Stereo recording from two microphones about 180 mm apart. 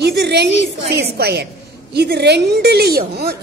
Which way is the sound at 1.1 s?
65° right (ahead or behind).